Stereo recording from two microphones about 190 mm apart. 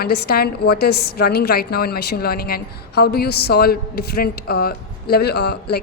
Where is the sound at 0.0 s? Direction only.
55° left (ahead or behind).